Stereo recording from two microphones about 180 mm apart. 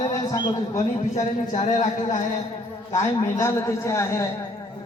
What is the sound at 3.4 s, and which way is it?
Speech, 15° left (ahead or behind).